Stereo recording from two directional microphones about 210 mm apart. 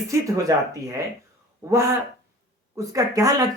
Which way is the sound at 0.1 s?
15° right (ahead or behind).